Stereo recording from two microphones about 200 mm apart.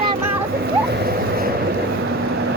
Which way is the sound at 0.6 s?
50° right (ahead or behind).